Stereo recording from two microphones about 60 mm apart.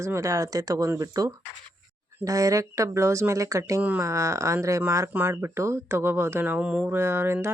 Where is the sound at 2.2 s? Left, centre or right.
Right.